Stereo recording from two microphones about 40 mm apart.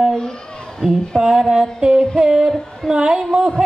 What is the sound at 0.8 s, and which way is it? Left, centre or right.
A man's voice, centre.